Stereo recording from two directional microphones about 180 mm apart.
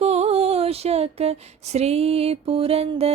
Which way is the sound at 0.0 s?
35° right (ahead or behind).